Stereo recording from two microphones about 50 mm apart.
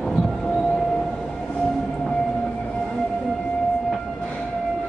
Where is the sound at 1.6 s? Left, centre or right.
Centre.